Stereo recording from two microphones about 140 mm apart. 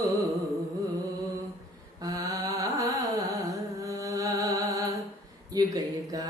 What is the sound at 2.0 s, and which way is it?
Carnatic music, 25° right (ahead or behind).